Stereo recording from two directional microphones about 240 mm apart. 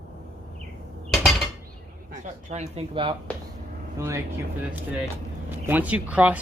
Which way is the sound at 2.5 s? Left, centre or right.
Right.